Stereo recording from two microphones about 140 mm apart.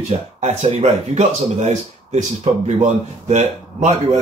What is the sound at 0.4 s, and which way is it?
Speech, 55° right (ahead or behind).